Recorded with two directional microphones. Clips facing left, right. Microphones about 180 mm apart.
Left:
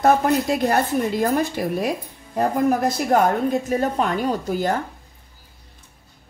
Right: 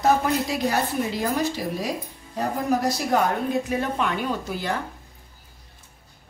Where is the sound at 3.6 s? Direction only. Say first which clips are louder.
Left 4 dB; 40° left (ahead or behind).